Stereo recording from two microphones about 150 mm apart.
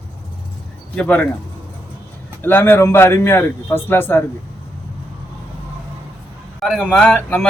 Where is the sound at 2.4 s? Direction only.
15° left (ahead or behind).